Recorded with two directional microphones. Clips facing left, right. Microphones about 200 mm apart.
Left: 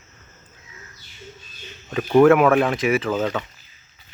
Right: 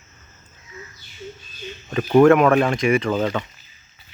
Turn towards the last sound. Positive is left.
turn(degrees=5)  # may be behind; listen again after turning